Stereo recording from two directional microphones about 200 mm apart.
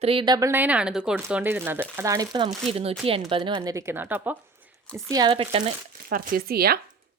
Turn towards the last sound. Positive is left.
turn(degrees=-50)  # may be behind; listen again after turning